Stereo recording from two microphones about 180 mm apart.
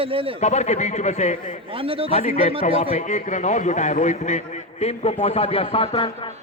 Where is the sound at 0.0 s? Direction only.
30° right (ahead or behind).